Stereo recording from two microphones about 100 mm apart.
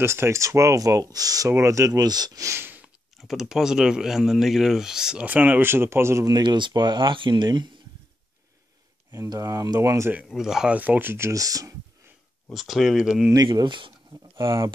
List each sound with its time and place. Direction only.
0.0 s speech: 25° right (ahead or behind)
3.2 s speech: 5° right (ahead or behind); by 6.3 s 25° right (ahead or behind)
6.3 s speech: 50° right (ahead or behind)
9.1 s speech: 35° right (ahead or behind)
10.1 s speech: 5° right (ahead or behind)
10.8 s speech: 20° right (ahead or behind); by 11.7 s 35° right (ahead or behind)
12.5 s speech: centre (ahead or behind)
13.6 s speech: 55° right (ahead or behind)
14.3 s speech: 30° right (ahead or behind)